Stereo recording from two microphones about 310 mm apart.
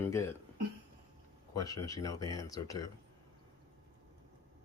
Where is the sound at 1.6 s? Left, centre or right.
Centre.